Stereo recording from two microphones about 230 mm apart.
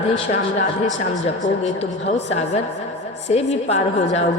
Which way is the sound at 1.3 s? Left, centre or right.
Left.